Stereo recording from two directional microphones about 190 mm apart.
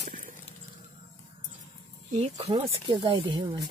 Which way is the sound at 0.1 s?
45° right (ahead or behind).